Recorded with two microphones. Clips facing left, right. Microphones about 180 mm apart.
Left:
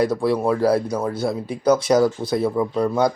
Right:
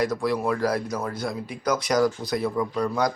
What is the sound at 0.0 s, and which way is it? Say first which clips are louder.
Speech: left 5 dB; 30° left (ahead or behind).